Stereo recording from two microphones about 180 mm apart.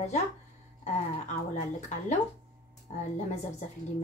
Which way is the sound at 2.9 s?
40° left (ahead or behind).